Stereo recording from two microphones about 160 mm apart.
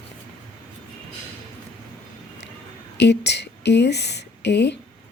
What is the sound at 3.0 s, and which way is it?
Speech, 90° left.